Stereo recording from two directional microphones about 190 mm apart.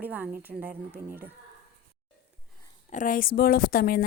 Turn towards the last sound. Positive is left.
turn(degrees=50)  # may be behind; listen again after turning